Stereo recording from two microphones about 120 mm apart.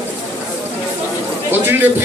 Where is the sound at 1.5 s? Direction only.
20° right (ahead or behind).